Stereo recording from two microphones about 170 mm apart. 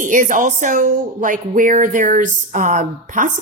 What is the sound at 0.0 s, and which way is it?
Speech, 50° right (ahead or behind).